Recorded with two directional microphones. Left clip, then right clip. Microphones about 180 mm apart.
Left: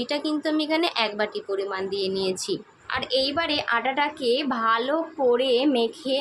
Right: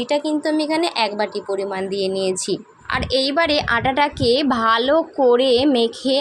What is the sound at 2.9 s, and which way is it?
A woman's voice, 35° right (ahead or behind).